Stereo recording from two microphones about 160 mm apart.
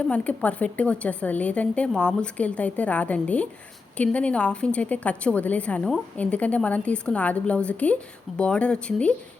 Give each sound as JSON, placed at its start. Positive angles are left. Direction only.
{"t": 0.0, "sound": "a woman's voice", "side_deg": 10}